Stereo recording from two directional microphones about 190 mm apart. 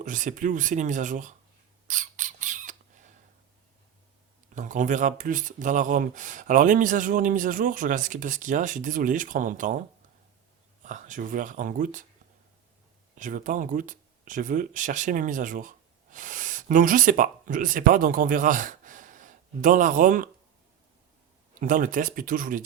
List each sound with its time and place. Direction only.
0.0 s speech: 40° right (ahead or behind)
1.9 s a sound: 40° right (ahead or behind)
4.5 s speech: 40° right (ahead or behind)
10.8 s speech: 40° right (ahead or behind)
13.1 s speech: 45° right (ahead or behind)
21.6 s speech: 45° right (ahead or behind)